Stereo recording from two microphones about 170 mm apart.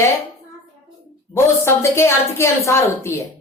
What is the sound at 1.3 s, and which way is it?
A woman's voice, 15° left (ahead or behind).